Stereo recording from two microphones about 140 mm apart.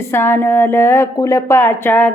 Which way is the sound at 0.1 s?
15° left (ahead or behind).